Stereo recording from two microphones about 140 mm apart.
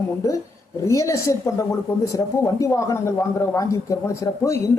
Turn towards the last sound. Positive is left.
turn(degrees=20)  # may be behind; listen again after turning